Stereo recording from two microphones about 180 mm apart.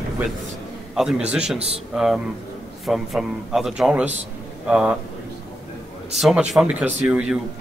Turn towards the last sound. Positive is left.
turn(degrees=-5)  # may be behind; listen again after turning